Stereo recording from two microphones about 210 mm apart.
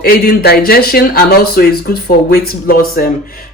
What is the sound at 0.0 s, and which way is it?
Speech, 45° left (ahead or behind).